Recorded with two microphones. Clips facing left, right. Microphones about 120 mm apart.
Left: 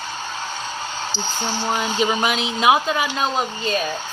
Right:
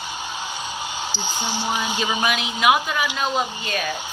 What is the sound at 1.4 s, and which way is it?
Speech, 15° right (ahead or behind).